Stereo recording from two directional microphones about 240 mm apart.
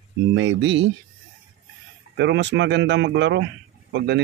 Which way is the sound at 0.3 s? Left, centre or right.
Right.